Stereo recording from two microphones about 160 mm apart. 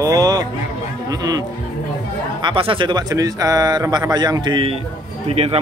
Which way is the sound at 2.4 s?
30° right (ahead or behind).